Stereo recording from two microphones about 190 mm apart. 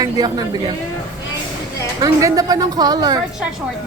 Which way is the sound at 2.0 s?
20° right (ahead or behind).